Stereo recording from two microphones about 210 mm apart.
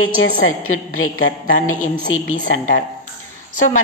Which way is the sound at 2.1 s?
75° left (ahead or behind).